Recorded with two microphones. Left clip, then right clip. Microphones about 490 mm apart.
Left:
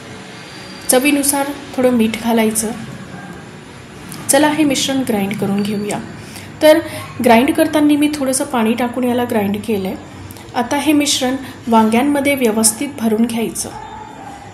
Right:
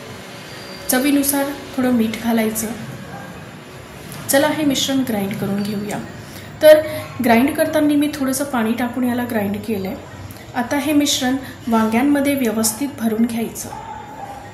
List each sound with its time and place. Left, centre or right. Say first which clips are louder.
0.8 s a woman's voice: left 4 dB; right
4.3 s a woman's voice: left 3 dB; right